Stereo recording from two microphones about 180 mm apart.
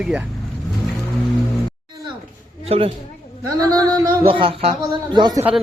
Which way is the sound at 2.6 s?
35° right (ahead or behind).